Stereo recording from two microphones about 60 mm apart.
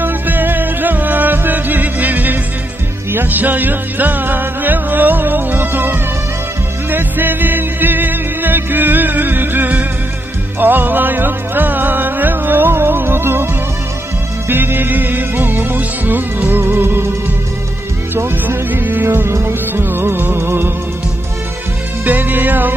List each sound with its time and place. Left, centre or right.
0.0 s music: right
14.5 s music: right
18.1 s music: right
22.0 s music: right